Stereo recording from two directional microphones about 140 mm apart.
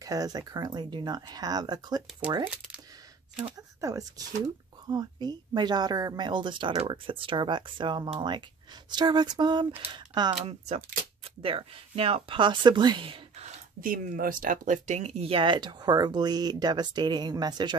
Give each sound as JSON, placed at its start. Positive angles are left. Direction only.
{"t": 0.0, "sound": "speech", "side_deg": -25}
{"t": 3.5, "sound": "speech", "side_deg": -25}
{"t": 13.7, "sound": "speech", "side_deg": -85}